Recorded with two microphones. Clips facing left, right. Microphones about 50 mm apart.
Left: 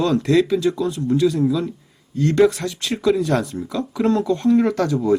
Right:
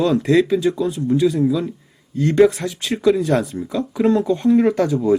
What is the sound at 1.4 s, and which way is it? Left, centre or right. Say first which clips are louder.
Speech: right 1 dB; centre.